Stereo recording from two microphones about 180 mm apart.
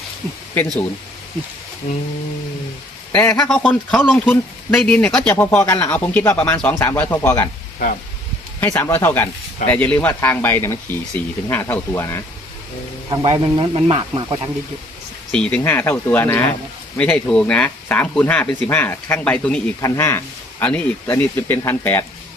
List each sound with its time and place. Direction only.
1.8 s a sound: 35° left (ahead or behind)
3.1 s speech: 10° left (ahead or behind)
8.6 s speech: 10° left (ahead or behind)
13.1 s speech: 25° right (ahead or behind)
15.3 s speech: 5° left (ahead or behind)